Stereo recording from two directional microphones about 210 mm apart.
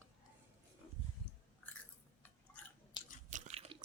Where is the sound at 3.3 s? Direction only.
35° right (ahead or behind).